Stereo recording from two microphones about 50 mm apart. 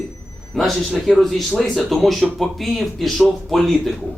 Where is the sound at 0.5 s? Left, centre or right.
Centre.